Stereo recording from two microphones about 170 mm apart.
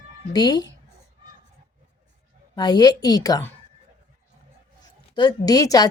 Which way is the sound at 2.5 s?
25° left (ahead or behind).